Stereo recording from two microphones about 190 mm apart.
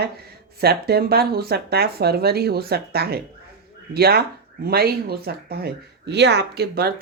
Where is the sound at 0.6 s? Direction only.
55° right (ahead or behind).